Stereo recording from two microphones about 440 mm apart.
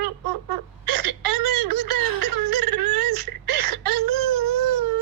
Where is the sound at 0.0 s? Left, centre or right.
Right.